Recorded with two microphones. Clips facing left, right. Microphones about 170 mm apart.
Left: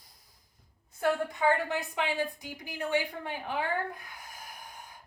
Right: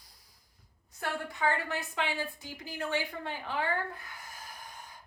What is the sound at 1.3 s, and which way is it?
A woman's voice, 15° left (ahead or behind).